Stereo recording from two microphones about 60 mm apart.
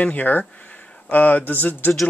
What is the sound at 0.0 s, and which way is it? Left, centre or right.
Speech, left.